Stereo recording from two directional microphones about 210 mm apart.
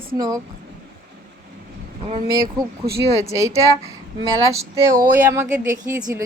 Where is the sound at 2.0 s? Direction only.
30° right (ahead or behind).